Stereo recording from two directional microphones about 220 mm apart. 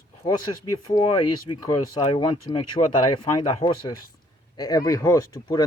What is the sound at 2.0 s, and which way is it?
Speech, 20° left (ahead or behind).